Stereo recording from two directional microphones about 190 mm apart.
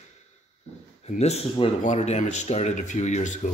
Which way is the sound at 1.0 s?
35° left (ahead or behind).